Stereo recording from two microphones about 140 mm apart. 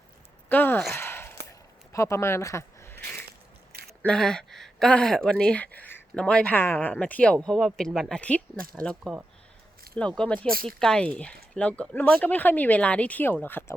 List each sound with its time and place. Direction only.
0.4 s speech: 15° left (ahead or behind)
0.9 s a sound: 15° left (ahead or behind)
4.0 s speech: 5° left (ahead or behind)
10.4 s speech: 90° right
10.7 s speech: 5° left (ahead or behind)